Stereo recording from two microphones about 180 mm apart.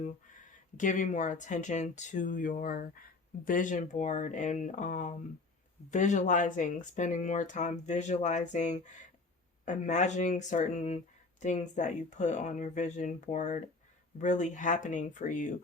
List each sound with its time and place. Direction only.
0.8 s speech: 45° left (ahead or behind)